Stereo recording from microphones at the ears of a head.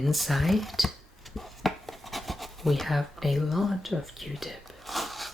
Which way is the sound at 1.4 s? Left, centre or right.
Centre.